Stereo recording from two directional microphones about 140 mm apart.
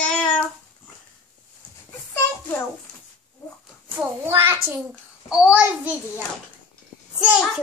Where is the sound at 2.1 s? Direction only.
20° left (ahead or behind).